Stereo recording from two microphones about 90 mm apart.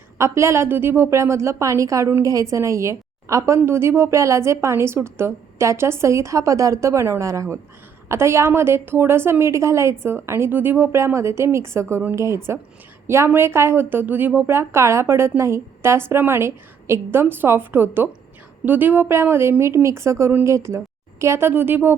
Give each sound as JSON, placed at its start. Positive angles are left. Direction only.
{"t": 0.2, "sound": "a woman's voice", "side_deg": -30}